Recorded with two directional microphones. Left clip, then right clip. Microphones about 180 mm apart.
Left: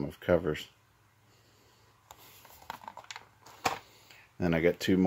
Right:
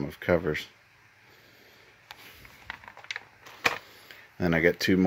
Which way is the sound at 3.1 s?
75° left (ahead or behind).